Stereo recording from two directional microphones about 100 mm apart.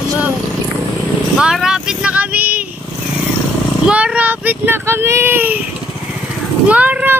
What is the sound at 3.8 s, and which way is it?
Speech, 15° right (ahead or behind).